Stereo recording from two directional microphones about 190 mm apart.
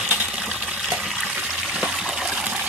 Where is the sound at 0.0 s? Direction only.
10° right (ahead or behind).